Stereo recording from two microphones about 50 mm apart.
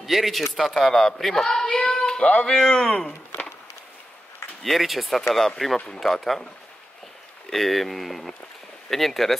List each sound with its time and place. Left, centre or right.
0.0 s a woman's voice: centre
2.2 s speech: left
2.5 s speech: centre
4.6 s a woman's voice: centre
7.4 s a woman's voice: centre